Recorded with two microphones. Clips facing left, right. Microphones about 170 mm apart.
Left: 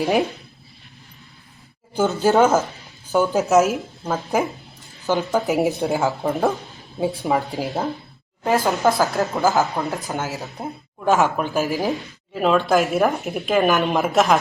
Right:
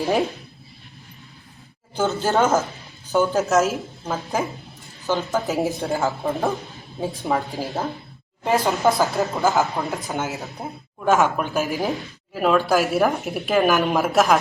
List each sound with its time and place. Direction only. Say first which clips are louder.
2.0 s speech: left 4 dB; 10° left (ahead or behind)
8.4 s a woman's voice: left 1 dB; centre (ahead or behind)